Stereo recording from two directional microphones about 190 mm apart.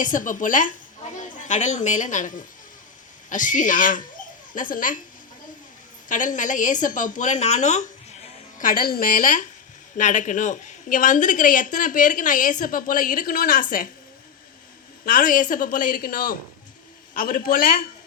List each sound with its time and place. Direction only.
0.0 s a woman's voice: 45° left (ahead or behind)
6.1 s a woman's voice: 40° left (ahead or behind)
15.0 s a woman's voice: 45° left (ahead or behind)